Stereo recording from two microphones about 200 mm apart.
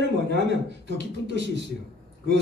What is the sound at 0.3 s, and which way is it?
A man's voice, 60° right (ahead or behind).